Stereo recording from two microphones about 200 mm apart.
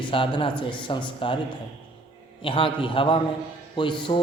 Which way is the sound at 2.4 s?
25° left (ahead or behind).